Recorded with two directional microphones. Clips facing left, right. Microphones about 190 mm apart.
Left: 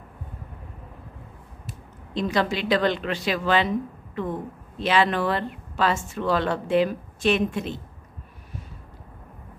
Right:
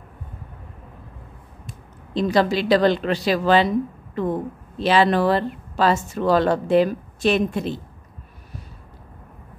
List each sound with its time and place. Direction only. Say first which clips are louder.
2.1 s speech: right 5 dB; 35° right (ahead or behind)